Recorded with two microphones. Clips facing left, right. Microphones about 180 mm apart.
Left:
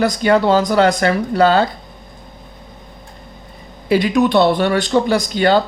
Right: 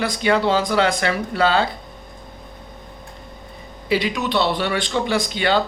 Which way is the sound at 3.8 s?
50° left (ahead or behind).